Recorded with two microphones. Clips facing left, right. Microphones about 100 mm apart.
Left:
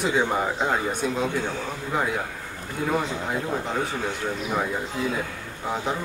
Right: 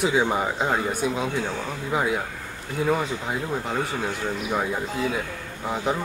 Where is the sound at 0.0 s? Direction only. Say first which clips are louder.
Right 1 dB; 5° right (ahead or behind).